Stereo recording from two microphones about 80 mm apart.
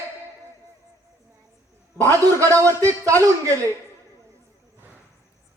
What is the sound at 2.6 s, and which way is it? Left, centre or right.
Speech, right.